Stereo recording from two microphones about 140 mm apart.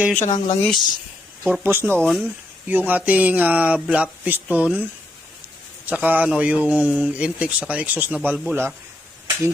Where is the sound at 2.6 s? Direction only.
15° right (ahead or behind).